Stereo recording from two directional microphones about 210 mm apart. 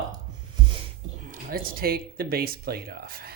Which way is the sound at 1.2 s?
45° right (ahead or behind).